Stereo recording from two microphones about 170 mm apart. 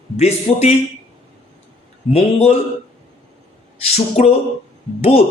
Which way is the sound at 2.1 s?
35° left (ahead or behind).